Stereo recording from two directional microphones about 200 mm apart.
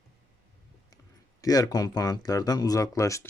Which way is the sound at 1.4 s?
20° left (ahead or behind).